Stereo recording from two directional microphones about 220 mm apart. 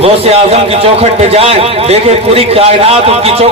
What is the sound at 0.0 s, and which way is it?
A man's voice, 25° right (ahead or behind).